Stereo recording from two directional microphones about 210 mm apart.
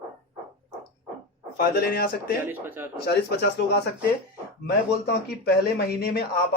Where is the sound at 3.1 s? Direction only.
50° left (ahead or behind).